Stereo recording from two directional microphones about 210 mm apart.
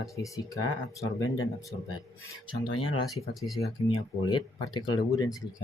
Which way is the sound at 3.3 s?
Centre (ahead or behind).